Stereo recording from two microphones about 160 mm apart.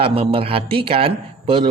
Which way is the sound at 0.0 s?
35° right (ahead or behind).